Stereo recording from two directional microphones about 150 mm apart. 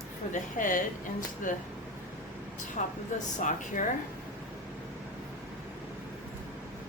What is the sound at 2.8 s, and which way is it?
Speech, 60° left (ahead or behind).